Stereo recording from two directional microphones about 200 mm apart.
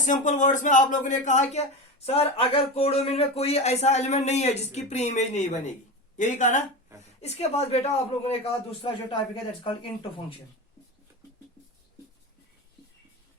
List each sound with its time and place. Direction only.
0.0 s speech: 40° left (ahead or behind)